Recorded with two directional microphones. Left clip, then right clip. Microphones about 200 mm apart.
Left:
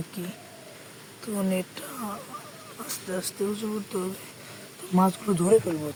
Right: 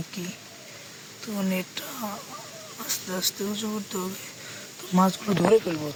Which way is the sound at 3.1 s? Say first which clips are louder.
Left 1 dB; 5° right (ahead or behind).